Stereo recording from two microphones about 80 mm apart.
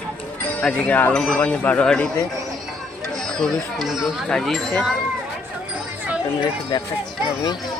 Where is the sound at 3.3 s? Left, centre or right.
Centre.